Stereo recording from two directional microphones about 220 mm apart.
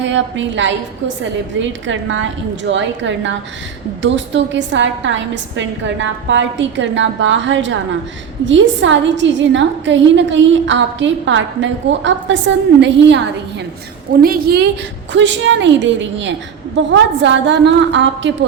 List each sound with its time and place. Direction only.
0.0 s a woman's voice: 55° right (ahead or behind)
15.1 s a woman's voice: 55° right (ahead or behind)